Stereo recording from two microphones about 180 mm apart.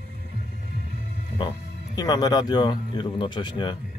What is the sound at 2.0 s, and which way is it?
Speech, 20° left (ahead or behind).